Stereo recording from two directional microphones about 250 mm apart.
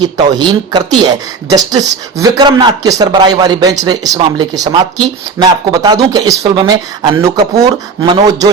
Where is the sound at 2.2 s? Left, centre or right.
Centre.